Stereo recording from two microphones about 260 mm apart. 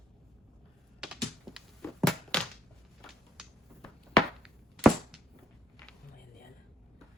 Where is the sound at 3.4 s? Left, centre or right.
Centre.